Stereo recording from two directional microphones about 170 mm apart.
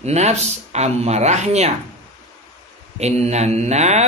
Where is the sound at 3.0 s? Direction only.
40° right (ahead or behind).